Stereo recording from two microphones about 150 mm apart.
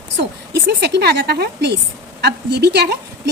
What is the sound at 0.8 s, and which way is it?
Speech, 90° right.